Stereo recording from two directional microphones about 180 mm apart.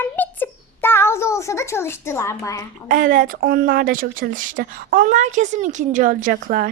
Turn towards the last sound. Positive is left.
turn(degrees=-50)  # may be behind; listen again after turning